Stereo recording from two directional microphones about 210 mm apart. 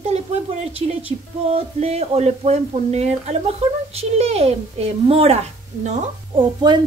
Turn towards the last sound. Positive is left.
turn(degrees=-20)  # may be behind; listen again after turning